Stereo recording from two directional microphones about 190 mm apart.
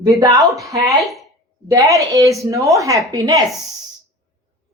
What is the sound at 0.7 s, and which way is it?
Speech, 15° right (ahead or behind).